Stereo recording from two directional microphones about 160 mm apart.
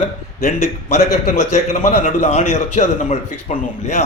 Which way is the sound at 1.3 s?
45° left (ahead or behind).